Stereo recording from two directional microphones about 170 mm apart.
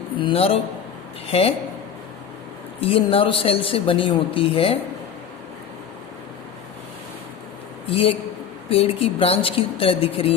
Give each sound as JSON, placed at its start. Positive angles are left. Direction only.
{"t": 0.2, "sound": "speech", "side_deg": 30}
{"t": 2.8, "sound": "speech", "side_deg": 35}
{"t": 7.9, "sound": "speech", "side_deg": 35}